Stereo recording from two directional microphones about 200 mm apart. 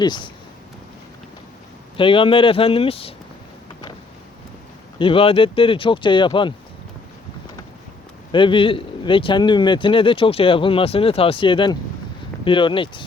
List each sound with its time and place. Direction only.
0.0 s speech: 20° left (ahead or behind)
2.0 s speech: 25° left (ahead or behind)
4.9 s speech: 25° left (ahead or behind)
8.3 s speech: 25° left (ahead or behind)